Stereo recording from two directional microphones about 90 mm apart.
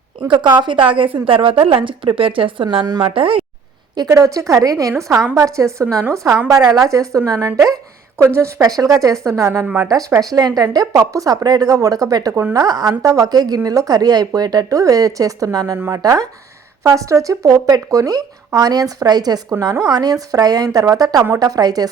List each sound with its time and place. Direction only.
0.3 s a woman's voice: 60° right (ahead or behind); by 3.4 s 80° right
3.9 s a woman's voice: 45° right (ahead or behind)
8.6 s speech: 40° right (ahead or behind)
9.6 s a woman's voice: 20° right (ahead or behind)
10.2 s a woman's voice: 45° right (ahead or behind)
12.3 s a woman's voice: 25° right (ahead or behind)
12.5 s a woman's voice: 45° right (ahead or behind)
19.9 s a woman's voice: 45° right (ahead or behind)